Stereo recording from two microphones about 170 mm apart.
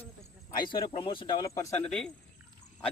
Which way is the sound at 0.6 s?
25° left (ahead or behind).